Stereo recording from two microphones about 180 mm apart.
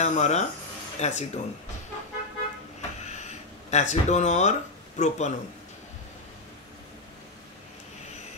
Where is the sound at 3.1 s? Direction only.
40° left (ahead or behind).